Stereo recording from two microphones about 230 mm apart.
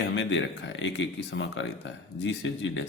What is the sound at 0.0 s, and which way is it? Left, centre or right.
Speech, left.